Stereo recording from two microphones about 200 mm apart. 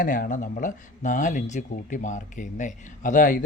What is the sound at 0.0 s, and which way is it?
Speech, 40° left (ahead or behind).